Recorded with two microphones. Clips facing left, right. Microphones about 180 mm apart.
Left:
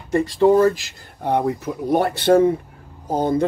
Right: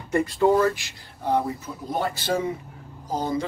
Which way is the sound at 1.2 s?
65° left (ahead or behind).